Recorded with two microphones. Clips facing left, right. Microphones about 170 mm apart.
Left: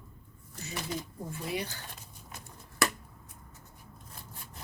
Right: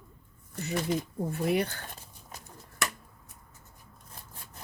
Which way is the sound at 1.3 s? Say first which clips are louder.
Right 8 dB; 60° right (ahead or behind).